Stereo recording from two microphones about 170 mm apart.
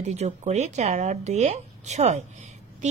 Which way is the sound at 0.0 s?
40° right (ahead or behind).